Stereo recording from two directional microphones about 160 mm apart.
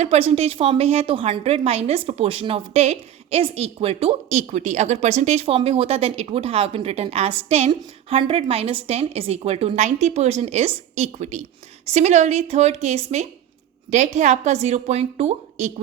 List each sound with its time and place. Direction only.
0.0 s a woman's voice: 40° right (ahead or behind)